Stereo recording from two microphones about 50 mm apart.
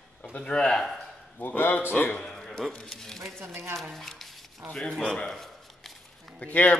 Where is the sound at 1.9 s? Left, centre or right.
Left.